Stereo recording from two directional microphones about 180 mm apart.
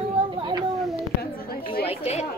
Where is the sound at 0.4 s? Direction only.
25° right (ahead or behind).